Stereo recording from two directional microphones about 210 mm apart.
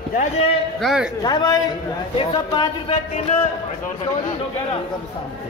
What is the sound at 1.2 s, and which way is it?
Speech, 20° left (ahead or behind).